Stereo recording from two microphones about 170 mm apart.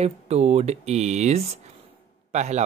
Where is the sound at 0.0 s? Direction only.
40° right (ahead or behind).